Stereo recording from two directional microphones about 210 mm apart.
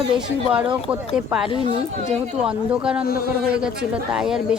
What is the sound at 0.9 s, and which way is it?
Speech, 5° right (ahead or behind).